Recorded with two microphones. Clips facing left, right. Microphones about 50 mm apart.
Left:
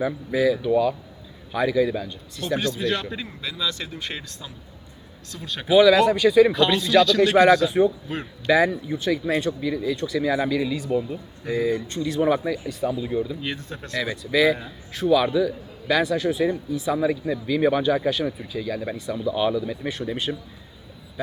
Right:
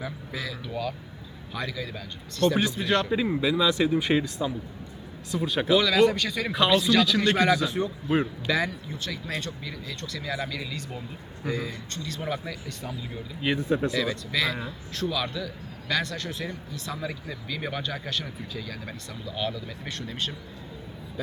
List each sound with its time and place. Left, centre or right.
0.0 s speech: centre
2.6 s speech: centre
5.6 s speech: centre
6.5 s speech: centre
8.0 s speech: centre
8.4 s speech: centre
13.4 s speech: centre
14.0 s speech: centre